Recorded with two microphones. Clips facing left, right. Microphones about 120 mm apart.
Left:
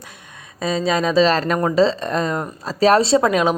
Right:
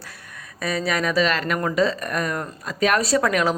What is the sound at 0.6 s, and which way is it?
A woman's voice, 25° left (ahead or behind).